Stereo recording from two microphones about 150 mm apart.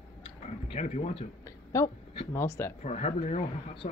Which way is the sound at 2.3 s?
20° left (ahead or behind).